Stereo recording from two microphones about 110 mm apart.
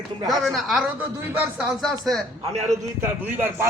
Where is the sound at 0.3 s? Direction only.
Centre (ahead or behind).